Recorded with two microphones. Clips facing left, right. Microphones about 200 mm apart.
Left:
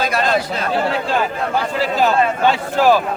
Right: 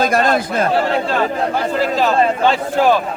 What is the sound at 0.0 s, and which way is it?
Speech, 50° right (ahead or behind).